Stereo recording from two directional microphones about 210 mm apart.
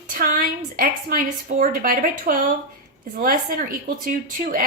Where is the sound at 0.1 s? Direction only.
40° right (ahead or behind).